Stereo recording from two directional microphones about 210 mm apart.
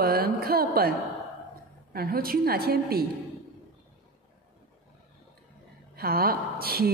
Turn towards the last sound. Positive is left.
turn(degrees=-45)  # may be behind; listen again after turning